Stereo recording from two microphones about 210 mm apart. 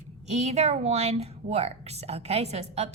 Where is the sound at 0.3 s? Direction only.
30° right (ahead or behind).